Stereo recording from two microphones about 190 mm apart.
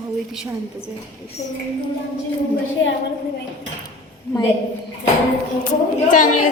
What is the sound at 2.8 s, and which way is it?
Speech, 80° left.